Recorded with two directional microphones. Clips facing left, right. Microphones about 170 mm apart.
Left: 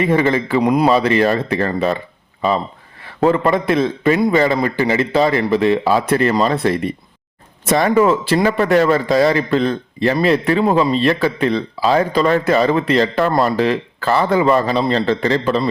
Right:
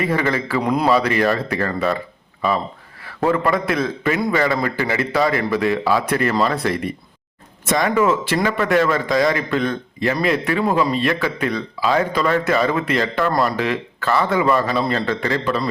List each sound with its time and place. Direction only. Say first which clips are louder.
0.0 s a man's voice: left 5 dB; 25° left (ahead or behind)
3.0 s a man's voice: left 4 dB; 25° left (ahead or behind)